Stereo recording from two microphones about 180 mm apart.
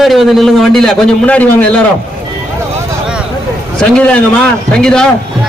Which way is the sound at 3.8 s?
5° left (ahead or behind).